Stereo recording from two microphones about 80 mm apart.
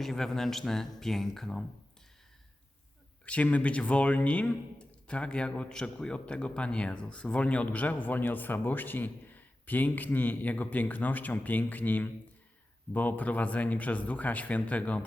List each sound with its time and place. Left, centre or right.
0.0 s speech: centre
3.2 s speech: centre